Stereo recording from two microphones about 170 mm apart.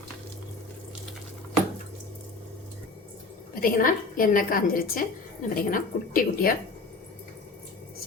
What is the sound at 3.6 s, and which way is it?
A woman's voice, 55° left (ahead or behind).